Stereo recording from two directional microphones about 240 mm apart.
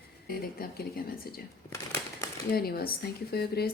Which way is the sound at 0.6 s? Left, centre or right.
Left.